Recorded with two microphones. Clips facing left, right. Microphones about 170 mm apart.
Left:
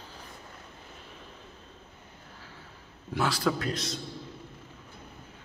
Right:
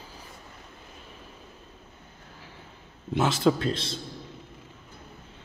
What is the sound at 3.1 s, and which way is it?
Speech, 25° right (ahead or behind).